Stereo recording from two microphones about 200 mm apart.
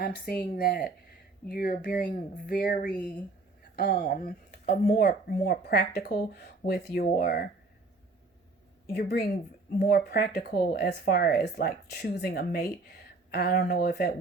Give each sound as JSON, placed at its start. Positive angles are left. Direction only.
{"t": 0.0, "sound": "speech", "side_deg": 45}
{"t": 8.9, "sound": "speech", "side_deg": 50}